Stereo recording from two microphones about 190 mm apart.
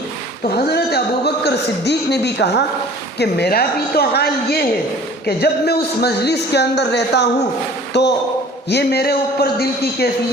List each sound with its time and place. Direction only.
0.5 s a man's voice: 55° left (ahead or behind)